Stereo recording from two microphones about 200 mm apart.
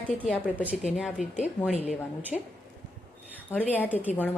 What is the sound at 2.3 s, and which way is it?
Speech, centre (ahead or behind).